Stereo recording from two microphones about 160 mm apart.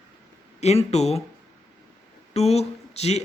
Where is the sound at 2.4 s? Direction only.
40° left (ahead or behind).